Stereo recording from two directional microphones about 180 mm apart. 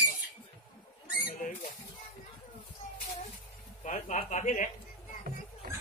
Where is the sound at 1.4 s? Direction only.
45° left (ahead or behind).